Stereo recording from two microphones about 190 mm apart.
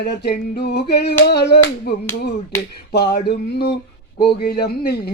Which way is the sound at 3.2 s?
60° left (ahead or behind).